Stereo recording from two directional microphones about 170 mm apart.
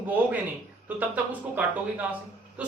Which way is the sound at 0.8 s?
10° right (ahead or behind).